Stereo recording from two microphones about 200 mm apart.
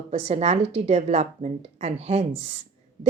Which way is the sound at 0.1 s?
30° right (ahead or behind).